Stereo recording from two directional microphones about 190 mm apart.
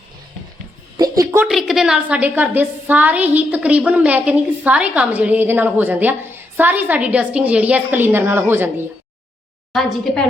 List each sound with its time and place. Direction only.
0.9 s a sound: 20° right (ahead or behind)
1.5 s a woman's voice: centre (ahead or behind)
9.7 s a woman's voice: centre (ahead or behind)